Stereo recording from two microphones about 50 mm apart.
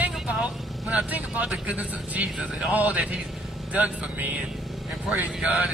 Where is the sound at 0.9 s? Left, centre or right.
Right.